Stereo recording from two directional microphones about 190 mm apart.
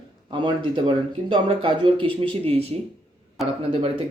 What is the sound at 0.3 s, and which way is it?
Speech, 25° right (ahead or behind).